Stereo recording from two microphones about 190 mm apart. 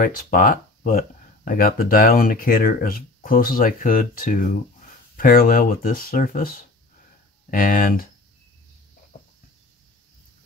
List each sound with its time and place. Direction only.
0.0 s speech: 45° left (ahead or behind)